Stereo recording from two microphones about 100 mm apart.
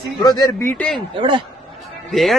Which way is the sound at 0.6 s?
25° left (ahead or behind).